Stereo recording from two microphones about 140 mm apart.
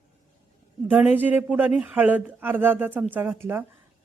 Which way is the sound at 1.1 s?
10° right (ahead or behind).